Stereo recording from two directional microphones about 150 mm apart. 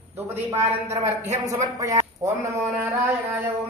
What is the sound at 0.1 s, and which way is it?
A man's voice, 15° right (ahead or behind).